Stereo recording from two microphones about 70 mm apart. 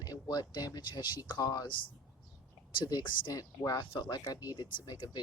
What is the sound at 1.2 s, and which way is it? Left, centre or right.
Speech, left.